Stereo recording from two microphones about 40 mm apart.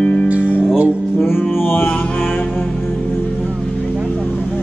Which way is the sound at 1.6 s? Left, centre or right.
Left.